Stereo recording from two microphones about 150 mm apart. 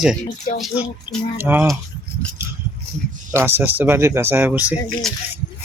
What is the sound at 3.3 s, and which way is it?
Speech, 15° right (ahead or behind).